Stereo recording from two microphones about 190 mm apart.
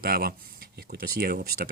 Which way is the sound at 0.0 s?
55° right (ahead or behind).